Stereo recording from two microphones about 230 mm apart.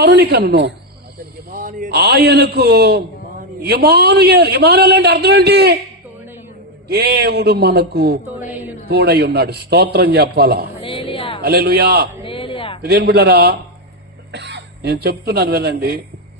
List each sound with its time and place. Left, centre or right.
0.0 s a man's voice: right
6.9 s a man's voice: right
8.5 s a woman's voice: centre
8.8 s a man's voice: right
10.8 s music: left
11.4 s a man's voice: right
12.2 s a sound: left
12.8 s a man's voice: right